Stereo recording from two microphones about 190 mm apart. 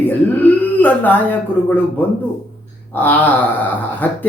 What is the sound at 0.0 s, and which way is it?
Speech, 10° left (ahead or behind).